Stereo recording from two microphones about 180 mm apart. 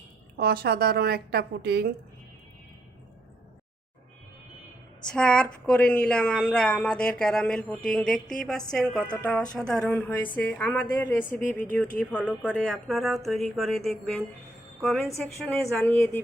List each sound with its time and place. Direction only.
0.3 s a woman's voice: 60° right (ahead or behind)
5.0 s speech: 5° left (ahead or behind)